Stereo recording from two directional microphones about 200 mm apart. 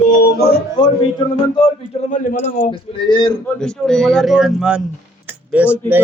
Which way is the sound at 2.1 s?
40° left (ahead or behind).